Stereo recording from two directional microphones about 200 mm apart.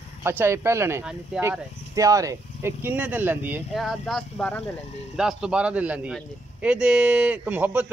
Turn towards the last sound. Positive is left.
turn(degrees=-10)  # may be behind; listen again after turning